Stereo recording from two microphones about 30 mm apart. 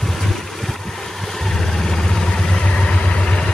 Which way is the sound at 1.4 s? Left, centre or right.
Centre.